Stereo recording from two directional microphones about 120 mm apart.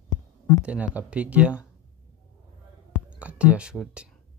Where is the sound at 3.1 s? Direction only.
10° right (ahead or behind).